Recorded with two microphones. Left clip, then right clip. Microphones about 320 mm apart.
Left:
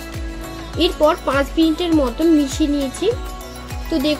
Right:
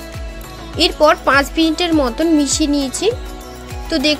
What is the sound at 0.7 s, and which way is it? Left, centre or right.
Speech, right.